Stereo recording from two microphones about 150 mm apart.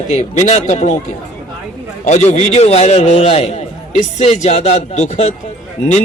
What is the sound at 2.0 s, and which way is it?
A man's voice, 50° left (ahead or behind).